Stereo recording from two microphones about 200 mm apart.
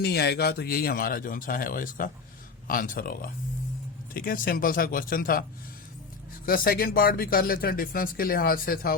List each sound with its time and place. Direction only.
0.0 s speech: 55° left (ahead or behind)